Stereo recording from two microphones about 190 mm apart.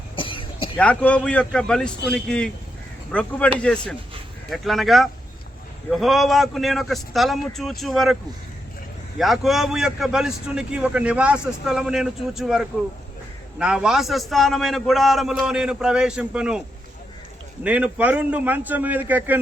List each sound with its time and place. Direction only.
0.2 s a sound: 25° left (ahead or behind)
0.8 s a man's voice: 5° left (ahead or behind)
9.1 s a man's voice: centre (ahead or behind)